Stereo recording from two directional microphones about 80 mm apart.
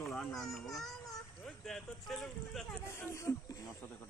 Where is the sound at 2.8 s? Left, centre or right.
Left.